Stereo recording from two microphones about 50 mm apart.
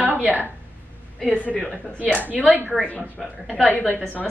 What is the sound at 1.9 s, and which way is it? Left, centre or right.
Speech, right.